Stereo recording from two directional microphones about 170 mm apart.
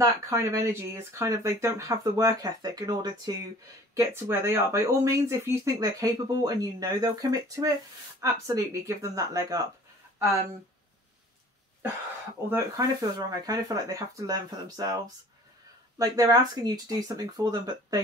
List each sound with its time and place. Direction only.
0.0 s speech: 20° right (ahead or behind)
12.4 s speech: 15° right (ahead or behind)
16.0 s speech: 20° right (ahead or behind)